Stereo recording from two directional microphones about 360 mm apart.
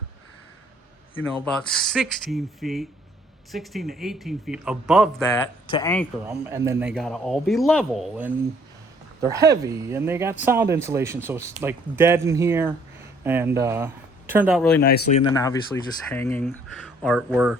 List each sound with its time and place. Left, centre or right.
1.5 s speech: centre
5.6 s speech: centre
6.2 s speech: centre
14.8 s speech: left
15.2 s speech: centre